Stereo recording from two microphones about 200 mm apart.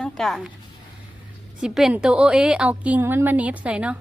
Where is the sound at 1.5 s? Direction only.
5° right (ahead or behind).